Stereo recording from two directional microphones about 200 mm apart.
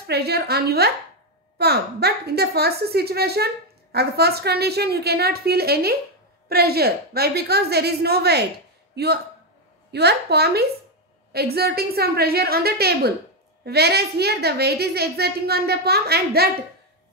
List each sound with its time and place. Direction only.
0.0 s a woman's voice: 55° right (ahead or behind)